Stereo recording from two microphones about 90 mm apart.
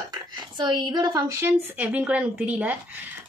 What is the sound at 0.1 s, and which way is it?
Speech, 55° right (ahead or behind).